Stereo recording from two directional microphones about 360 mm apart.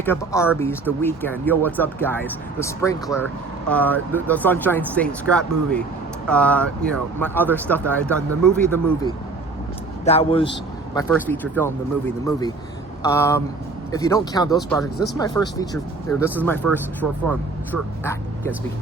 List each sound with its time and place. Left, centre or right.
0.0 s speech: centre
10.1 s speech: centre
10.9 s speech: centre
18.0 s speech: centre